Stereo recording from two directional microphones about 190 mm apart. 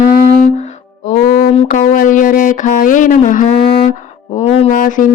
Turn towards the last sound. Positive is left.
turn(degrees=45)  # may be behind; listen again after turning